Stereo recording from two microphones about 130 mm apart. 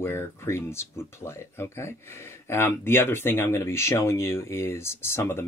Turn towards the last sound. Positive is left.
turn(degrees=20)  # may be behind; listen again after turning